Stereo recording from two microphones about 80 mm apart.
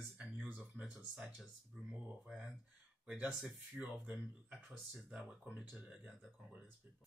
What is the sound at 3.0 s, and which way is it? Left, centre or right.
Speech, centre.